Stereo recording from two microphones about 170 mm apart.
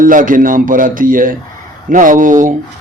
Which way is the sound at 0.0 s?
50° right (ahead or behind).